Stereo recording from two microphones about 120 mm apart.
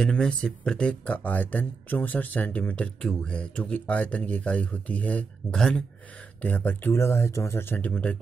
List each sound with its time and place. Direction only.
0.0 s speech: 5° left (ahead or behind)
6.4 s speech: 15° left (ahead or behind)